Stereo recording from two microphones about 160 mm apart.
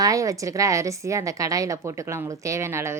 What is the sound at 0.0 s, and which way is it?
A woman's voice, 20° right (ahead or behind).